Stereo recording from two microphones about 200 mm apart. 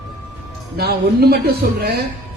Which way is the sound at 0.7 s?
50° right (ahead or behind).